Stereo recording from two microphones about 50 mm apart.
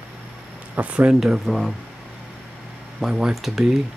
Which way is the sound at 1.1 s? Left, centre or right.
Centre.